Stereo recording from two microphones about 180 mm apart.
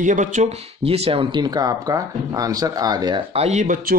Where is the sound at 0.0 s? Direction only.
45° right (ahead or behind).